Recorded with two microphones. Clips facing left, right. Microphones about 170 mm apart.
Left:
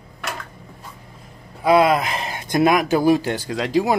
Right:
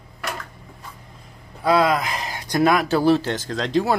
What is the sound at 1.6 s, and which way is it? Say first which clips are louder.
Speech: left 3 dB; 15° left (ahead or behind).